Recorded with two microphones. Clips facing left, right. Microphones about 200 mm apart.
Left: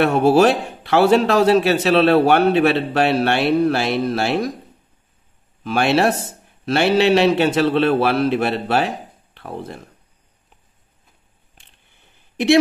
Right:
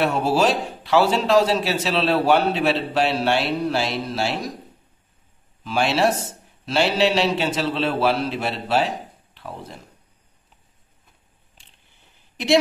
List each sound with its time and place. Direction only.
0.0 s a man's voice: 55° left (ahead or behind)
5.6 s a man's voice: 60° left (ahead or behind)